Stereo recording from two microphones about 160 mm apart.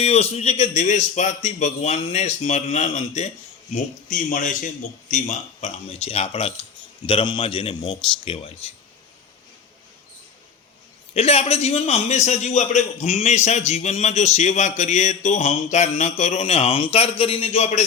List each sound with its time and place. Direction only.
0.0 s a man's voice: 40° left (ahead or behind)
11.1 s a man's voice: 40° left (ahead or behind)